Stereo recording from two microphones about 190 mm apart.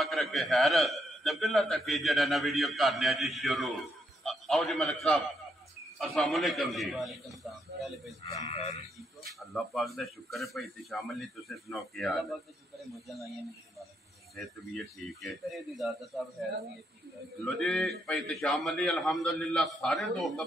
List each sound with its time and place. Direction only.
0.0 s a man's voice: centre (ahead or behind)
8.5 s speech: 35° left (ahead or behind)
9.4 s a man's voice: centre (ahead or behind)